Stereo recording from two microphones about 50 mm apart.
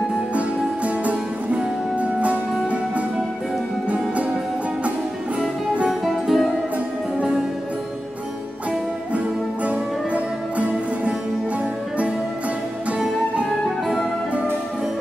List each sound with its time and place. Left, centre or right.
0.8 s music: right
5.9 s music: centre
7.2 s music: centre
9.7 s music: right
13.7 s music: centre